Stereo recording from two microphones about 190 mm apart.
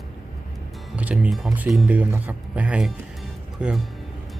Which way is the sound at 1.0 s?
5° right (ahead or behind).